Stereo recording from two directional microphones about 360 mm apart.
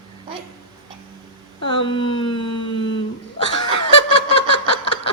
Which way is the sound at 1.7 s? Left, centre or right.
Centre.